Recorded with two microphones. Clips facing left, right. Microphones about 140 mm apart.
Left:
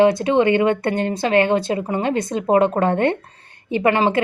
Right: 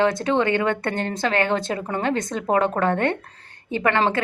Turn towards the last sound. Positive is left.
turn(degrees=20)  # may be behind; listen again after turning